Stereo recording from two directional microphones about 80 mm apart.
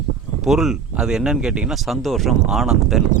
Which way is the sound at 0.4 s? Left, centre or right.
Centre.